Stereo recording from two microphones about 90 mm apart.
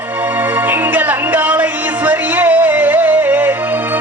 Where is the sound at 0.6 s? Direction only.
20° right (ahead or behind).